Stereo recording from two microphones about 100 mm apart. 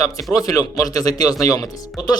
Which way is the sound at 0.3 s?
35° left (ahead or behind).